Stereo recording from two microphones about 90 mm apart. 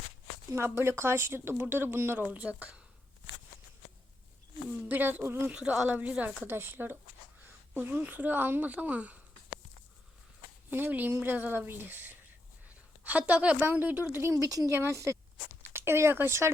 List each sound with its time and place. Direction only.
0.5 s speech: 30° right (ahead or behind)
4.9 s speech: 20° right (ahead or behind)
5.5 s a woman's voice: 10° right (ahead or behind)
10.7 s a woman's voice: 20° right (ahead or behind)